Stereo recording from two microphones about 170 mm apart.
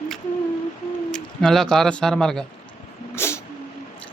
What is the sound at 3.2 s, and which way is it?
Vehicle, 15° left (ahead or behind).